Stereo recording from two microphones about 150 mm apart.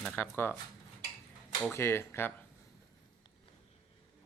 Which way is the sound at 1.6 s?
15° left (ahead or behind).